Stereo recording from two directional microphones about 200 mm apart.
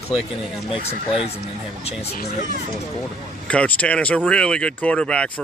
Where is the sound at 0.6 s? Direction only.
30° left (ahead or behind).